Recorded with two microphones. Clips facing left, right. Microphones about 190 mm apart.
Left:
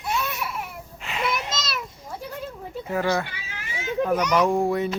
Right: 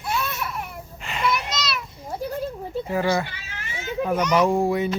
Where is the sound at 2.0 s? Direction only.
35° right (ahead or behind).